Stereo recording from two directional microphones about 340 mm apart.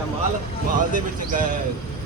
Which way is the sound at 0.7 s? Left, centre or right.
Right.